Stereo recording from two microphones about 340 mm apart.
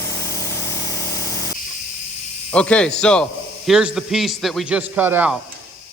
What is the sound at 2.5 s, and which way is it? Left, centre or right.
Speech, centre.